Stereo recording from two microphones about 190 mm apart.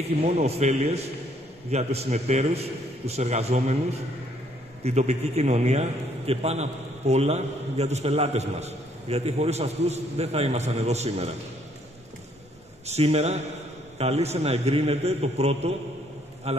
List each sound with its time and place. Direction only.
0.2 s a man's voice: 35° right (ahead or behind)
12.8 s a man's voice: 35° right (ahead or behind)